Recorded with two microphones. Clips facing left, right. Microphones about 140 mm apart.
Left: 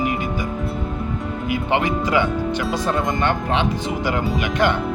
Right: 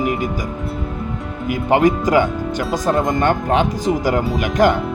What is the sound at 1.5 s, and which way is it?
Speech, 45° right (ahead or behind).